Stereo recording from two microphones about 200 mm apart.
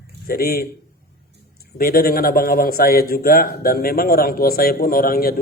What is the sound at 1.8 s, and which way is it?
A man's voice, 45° left (ahead or behind).